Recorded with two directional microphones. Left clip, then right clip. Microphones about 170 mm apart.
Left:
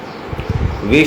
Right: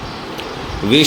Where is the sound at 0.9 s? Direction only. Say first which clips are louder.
Even; 35° right (ahead or behind).